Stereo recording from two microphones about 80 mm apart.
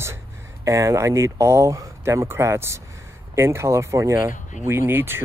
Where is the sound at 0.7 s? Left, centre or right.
Right.